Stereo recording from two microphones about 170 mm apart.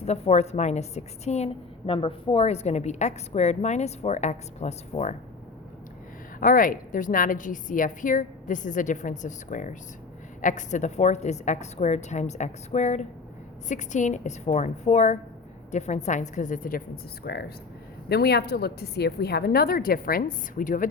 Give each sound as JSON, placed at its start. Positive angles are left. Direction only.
{"t": 0.0, "sound": "a woman's voice", "side_deg": 40}
{"t": 6.4, "sound": "a woman's voice", "side_deg": 55}